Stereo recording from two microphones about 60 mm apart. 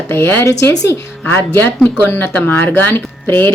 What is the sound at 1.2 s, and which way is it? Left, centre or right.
Speech, left.